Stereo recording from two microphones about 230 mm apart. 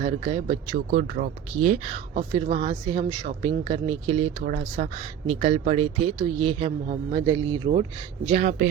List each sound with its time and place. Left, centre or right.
0.0 s speech: right